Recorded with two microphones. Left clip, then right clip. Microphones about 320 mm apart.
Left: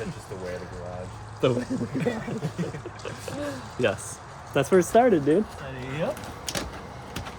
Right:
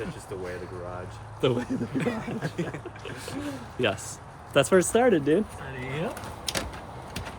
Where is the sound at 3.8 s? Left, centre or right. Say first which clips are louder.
Left 2 dB; centre.